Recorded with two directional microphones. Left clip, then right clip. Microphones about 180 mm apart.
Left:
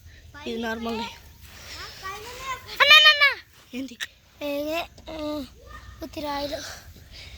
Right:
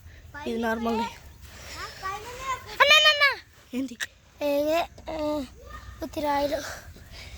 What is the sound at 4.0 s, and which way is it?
A child's voice, 65° right (ahead or behind).